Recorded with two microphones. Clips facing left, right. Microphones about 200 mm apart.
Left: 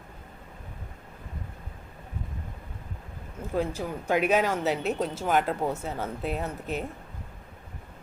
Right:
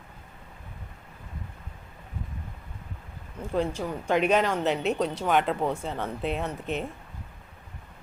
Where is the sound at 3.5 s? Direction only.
5° left (ahead or behind).